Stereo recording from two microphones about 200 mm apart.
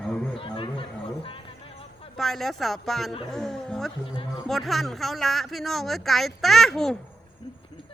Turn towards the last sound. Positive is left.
turn(degrees=0)  # may be behind; listen again after turning